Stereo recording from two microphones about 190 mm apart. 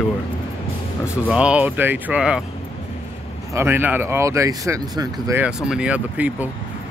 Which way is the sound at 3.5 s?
10° right (ahead or behind).